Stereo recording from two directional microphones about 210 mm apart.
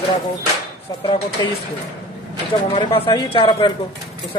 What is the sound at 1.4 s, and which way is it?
Speech, 20° left (ahead or behind).